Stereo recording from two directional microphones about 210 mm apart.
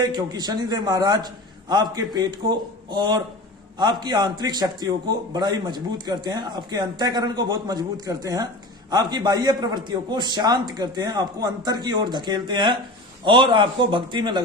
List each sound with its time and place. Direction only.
0.0 s a man's voice: 20° right (ahead or behind)